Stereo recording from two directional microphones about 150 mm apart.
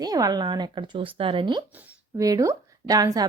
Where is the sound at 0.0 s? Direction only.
25° right (ahead or behind).